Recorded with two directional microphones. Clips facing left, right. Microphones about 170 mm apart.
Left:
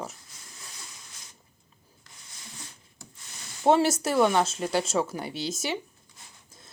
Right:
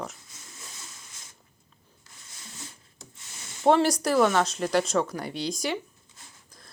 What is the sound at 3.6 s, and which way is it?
Speech, 5° left (ahead or behind).